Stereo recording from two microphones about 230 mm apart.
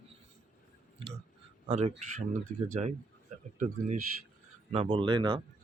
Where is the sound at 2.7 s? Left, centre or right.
Right.